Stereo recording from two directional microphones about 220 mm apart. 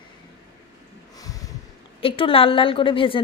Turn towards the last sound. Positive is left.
turn(degrees=25)  # may be behind; listen again after turning